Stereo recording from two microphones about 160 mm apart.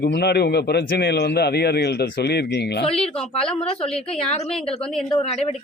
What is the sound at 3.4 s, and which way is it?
Speech, 5° left (ahead or behind).